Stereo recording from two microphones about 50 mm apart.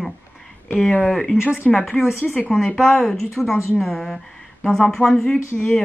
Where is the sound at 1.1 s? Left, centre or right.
Centre.